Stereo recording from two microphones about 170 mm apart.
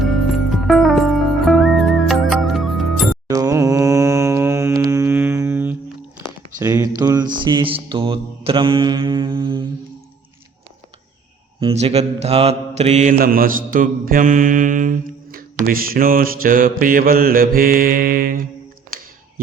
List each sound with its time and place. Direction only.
0.0 s music: centre (ahead or behind)
3.2 s mantra: 20° right (ahead or behind)
6.6 s a sound: 20° right (ahead or behind)
7.3 s mantra: 25° right (ahead or behind)
11.8 s mantra: 40° right (ahead or behind)
13.1 s mantra: 60° right (ahead or behind)